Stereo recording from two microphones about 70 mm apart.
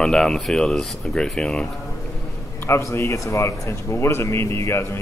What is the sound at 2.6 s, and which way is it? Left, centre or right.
A man's voice, left.